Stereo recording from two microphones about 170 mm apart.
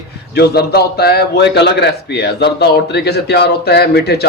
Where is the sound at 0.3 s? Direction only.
70° left (ahead or behind).